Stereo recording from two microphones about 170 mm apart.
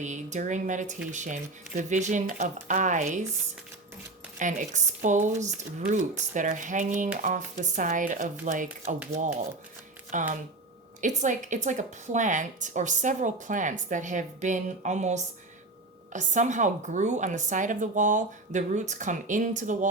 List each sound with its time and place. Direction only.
0.0 s a woman's voice: 45° right (ahead or behind)
4.4 s a woman's voice: 50° right (ahead or behind)
10.1 s a woman's voice: 50° right (ahead or behind)